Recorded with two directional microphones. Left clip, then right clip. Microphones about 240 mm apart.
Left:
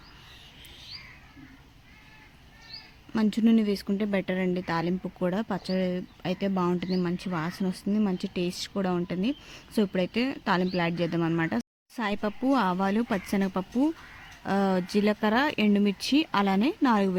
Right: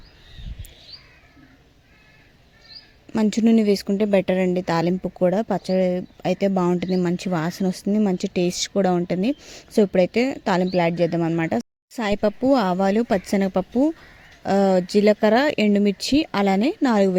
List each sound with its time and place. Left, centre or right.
3.1 s speech: right